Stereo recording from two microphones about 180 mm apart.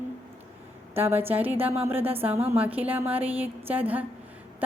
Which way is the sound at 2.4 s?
35° right (ahead or behind).